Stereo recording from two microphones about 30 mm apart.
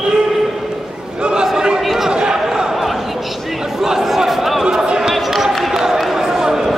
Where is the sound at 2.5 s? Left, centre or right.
Centre.